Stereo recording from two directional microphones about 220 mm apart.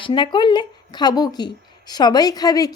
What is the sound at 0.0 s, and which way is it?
A woman's voice, 20° left (ahead or behind).